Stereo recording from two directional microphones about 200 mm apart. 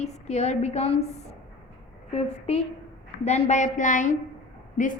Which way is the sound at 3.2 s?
35° left (ahead or behind).